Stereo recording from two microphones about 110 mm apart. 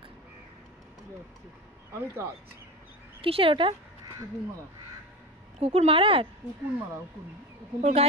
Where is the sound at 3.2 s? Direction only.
55° right (ahead or behind).